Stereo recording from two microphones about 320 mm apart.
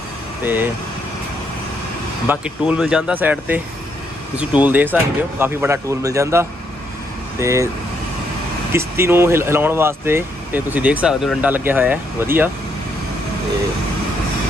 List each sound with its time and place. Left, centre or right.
0.4 s speech: centre
2.2 s speech: centre
8.7 s speech: centre